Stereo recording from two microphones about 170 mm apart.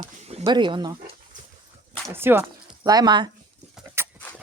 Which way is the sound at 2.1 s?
15° right (ahead or behind).